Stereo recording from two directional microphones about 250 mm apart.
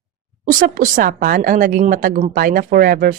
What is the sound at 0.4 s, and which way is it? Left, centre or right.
A woman's voice, right.